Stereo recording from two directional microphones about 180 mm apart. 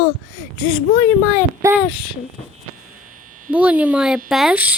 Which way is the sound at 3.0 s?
45° right (ahead or behind).